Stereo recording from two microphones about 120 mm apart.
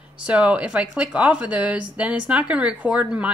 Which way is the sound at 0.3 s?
10° right (ahead or behind).